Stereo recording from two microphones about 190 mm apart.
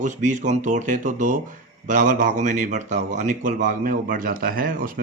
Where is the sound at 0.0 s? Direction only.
40° right (ahead or behind).